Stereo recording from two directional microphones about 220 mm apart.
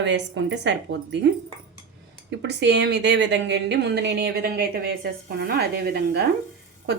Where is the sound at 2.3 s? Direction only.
55° right (ahead or behind).